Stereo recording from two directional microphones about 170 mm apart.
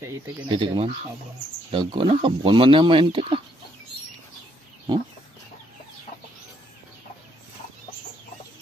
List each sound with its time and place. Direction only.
0.5 s speech: 30° right (ahead or behind)